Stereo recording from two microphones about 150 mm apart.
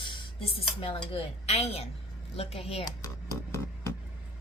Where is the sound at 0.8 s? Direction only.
40° left (ahead or behind).